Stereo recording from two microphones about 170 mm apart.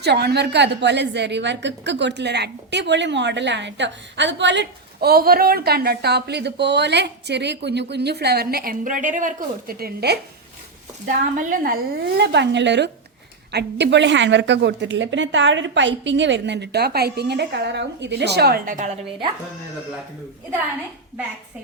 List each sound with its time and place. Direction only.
0.0 s a woman's voice: 75° right (ahead or behind)
11.0 s a woman's voice: 50° right (ahead or behind)